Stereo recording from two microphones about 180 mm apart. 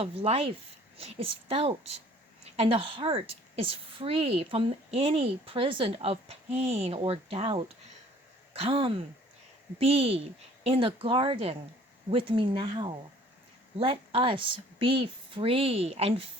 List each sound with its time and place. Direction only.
0.0 s a woman's voice: 35° right (ahead or behind)